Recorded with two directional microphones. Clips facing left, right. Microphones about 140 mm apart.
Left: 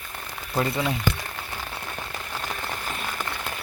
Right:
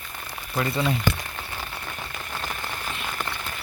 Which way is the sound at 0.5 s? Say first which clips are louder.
Even; 15° left (ahead or behind).